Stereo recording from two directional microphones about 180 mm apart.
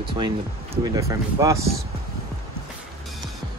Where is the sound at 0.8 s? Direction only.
20° right (ahead or behind).